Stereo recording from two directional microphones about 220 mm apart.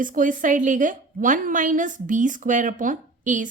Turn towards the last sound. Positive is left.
turn(degrees=-35)  # may be behind; listen again after turning